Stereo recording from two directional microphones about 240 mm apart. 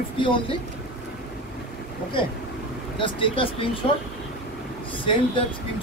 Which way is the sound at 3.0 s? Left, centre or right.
Left.